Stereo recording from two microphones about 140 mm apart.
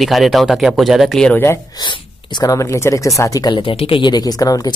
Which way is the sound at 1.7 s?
35° left (ahead or behind).